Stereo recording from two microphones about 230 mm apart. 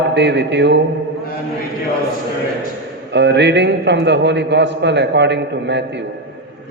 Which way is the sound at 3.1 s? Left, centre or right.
Right.